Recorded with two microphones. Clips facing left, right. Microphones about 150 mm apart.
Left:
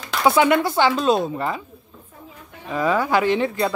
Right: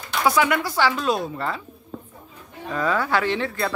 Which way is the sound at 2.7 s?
15° left (ahead or behind).